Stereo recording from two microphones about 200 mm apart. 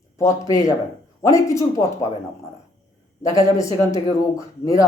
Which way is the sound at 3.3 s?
15° left (ahead or behind).